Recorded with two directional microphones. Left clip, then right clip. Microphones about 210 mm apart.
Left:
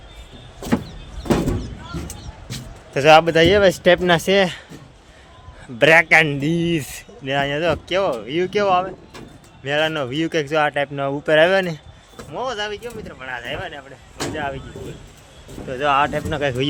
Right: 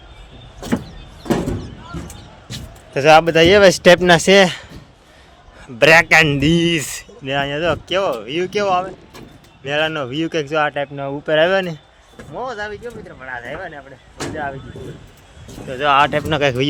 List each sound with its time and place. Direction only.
0.6 s vehicle: 20° right (ahead or behind)
2.5 s a sound: 15° right (ahead or behind)
2.9 s speech: 5° right (ahead or behind)
5.6 s speech: 15° right (ahead or behind)
7.3 s speech: centre (ahead or behind)
8.7 s speech: centre (ahead or behind)
11.3 s speech: centre (ahead or behind)
15.8 s speech: 15° right (ahead or behind)